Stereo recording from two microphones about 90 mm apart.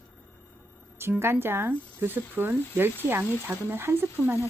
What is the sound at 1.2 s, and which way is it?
Speech, 25° right (ahead or behind).